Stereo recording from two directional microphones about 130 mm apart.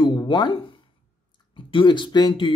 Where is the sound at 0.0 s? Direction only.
35° left (ahead or behind).